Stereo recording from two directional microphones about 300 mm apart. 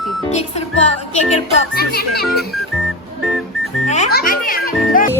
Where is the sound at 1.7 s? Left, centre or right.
Left.